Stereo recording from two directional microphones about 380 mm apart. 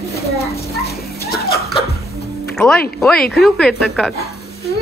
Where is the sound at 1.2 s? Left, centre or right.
Left.